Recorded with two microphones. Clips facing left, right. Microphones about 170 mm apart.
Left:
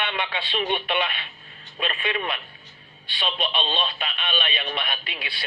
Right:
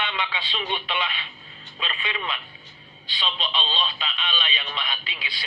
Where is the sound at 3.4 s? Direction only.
60° left (ahead or behind).